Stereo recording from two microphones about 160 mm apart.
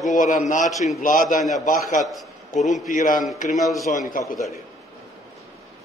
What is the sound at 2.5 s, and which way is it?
Speech, 55° left (ahead or behind).